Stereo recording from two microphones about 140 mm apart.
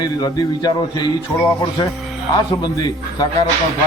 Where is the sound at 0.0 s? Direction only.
30° left (ahead or behind).